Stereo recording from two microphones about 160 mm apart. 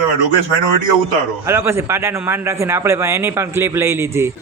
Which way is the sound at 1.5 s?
15° right (ahead or behind).